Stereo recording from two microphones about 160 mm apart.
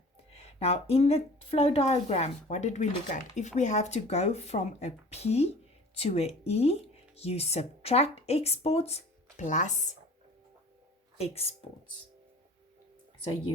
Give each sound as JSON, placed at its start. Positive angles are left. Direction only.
{"t": 0.3, "sound": "a woman's voice", "side_deg": 40}
{"t": 11.2, "sound": "a woman's voice", "side_deg": 40}